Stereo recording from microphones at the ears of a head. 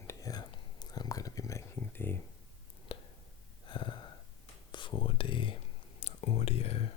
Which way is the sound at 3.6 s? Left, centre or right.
Left.